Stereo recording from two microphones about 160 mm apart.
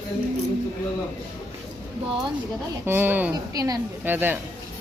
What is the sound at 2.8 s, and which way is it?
Speech, 15° right (ahead or behind).